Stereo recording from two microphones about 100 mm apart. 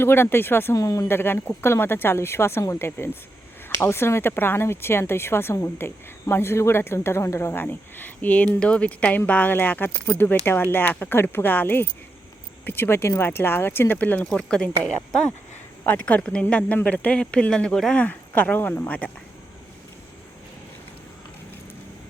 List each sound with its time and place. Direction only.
0.0 s speech: 25° left (ahead or behind)
0.8 s speech: 35° left (ahead or behind); by 19.1 s 15° left (ahead or behind)